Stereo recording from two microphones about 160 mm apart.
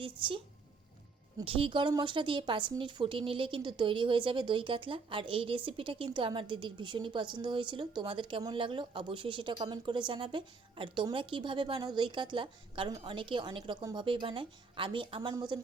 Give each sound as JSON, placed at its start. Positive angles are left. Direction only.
{"t": 0.0, "sound": "a woman's voice", "side_deg": -35}
{"t": 1.5, "sound": "a woman's voice", "side_deg": -35}